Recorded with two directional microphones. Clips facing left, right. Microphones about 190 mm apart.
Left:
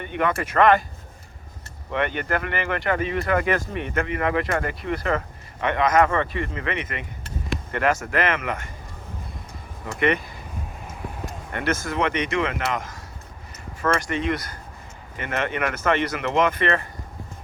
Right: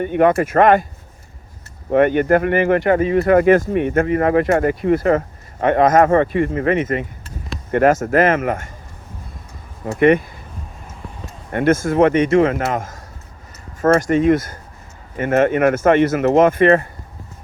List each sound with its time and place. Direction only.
0.0 s speech: 45° right (ahead or behind)
1.9 s speech: 45° right (ahead or behind)
9.8 s speech: 50° right (ahead or behind)
11.5 s speech: 50° right (ahead or behind)